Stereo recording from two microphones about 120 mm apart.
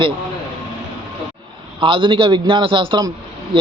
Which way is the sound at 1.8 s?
45° right (ahead or behind).